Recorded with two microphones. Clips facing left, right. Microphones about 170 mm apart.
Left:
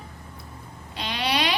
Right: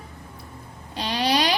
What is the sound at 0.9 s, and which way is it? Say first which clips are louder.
Speech: right 4 dB; 35° right (ahead or behind).